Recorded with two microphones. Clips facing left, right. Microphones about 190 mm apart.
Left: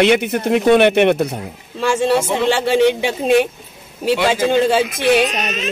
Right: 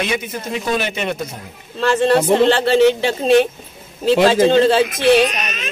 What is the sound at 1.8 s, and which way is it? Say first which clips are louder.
A man's voice: right 1 dB; 10° left (ahead or behind).